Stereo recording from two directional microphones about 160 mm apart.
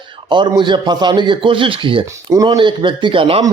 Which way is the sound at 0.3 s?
30° right (ahead or behind).